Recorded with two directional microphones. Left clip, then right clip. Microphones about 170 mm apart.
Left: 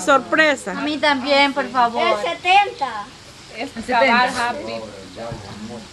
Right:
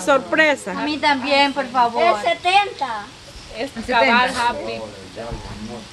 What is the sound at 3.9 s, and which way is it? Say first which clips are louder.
Speech: even; 25° right (ahead or behind).